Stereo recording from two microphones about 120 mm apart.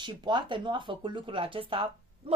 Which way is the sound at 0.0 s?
40° right (ahead or behind).